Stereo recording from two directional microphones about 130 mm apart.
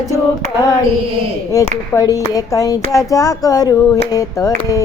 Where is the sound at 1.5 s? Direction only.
25° left (ahead or behind).